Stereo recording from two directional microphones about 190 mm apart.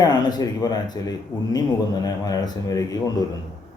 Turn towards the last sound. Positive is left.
turn(degrees=20)  # may be behind; listen again after turning